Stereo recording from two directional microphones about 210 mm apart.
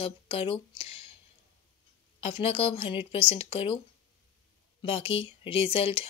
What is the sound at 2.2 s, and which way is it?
Speech, 30° left (ahead or behind).